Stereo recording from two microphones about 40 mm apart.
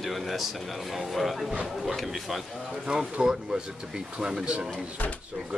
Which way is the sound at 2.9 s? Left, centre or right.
Right.